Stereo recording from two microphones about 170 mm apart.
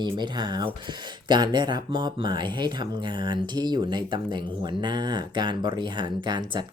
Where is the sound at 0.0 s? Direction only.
25° right (ahead or behind).